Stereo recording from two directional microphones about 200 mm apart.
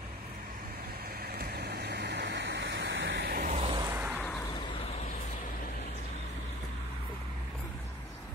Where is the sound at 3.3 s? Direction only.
45° right (ahead or behind).